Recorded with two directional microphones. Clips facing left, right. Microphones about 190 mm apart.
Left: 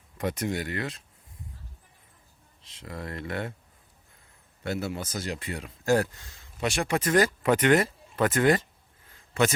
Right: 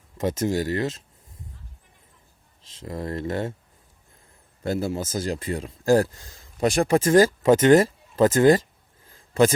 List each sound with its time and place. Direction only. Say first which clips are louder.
0.2 s speech: right 6 dB; 30° right (ahead or behind)
2.8 s speech: right 7 dB; 35° right (ahead or behind)
4.6 s speech: right 5 dB; 30° right (ahead or behind)
9.0 s a sound: right 6 dB; 30° right (ahead or behind)